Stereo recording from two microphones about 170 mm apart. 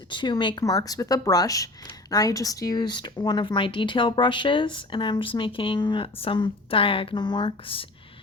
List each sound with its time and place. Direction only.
0.1 s speech: 30° left (ahead or behind)